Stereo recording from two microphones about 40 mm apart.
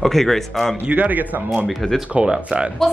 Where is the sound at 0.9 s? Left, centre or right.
Right.